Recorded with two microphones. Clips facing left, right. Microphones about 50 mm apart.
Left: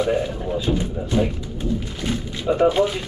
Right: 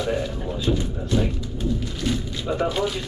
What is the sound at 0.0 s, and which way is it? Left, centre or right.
Speech, centre.